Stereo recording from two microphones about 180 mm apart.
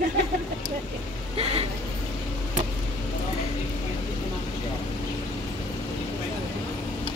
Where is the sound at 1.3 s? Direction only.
35° right (ahead or behind).